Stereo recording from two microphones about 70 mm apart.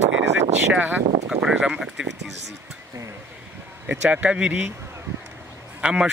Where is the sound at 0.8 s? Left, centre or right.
Right.